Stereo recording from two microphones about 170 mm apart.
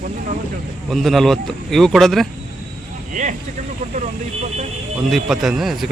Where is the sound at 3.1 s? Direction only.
45° right (ahead or behind).